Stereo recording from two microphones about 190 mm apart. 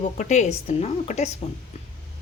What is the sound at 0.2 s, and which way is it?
A woman's voice, 35° left (ahead or behind).